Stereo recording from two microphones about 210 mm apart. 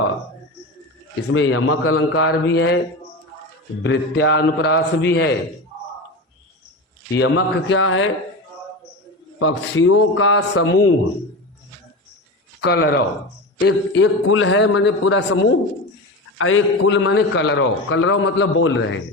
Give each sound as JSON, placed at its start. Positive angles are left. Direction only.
{"t": 1.3, "sound": "a man's voice", "side_deg": 70}
{"t": 2.2, "sound": "a man's voice", "side_deg": 55}
{"t": 3.8, "sound": "a man's voice", "side_deg": 55}
{"t": 7.1, "sound": "a man's voice", "side_deg": 60}
{"t": 9.4, "sound": "a man's voice", "side_deg": 75}
{"t": 12.6, "sound": "a man's voice", "side_deg": 50}